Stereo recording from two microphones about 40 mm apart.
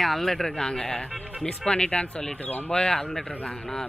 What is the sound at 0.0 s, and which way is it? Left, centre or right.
Speech, centre.